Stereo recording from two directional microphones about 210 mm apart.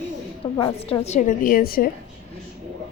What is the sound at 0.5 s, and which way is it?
A woman's voice, 25° left (ahead or behind).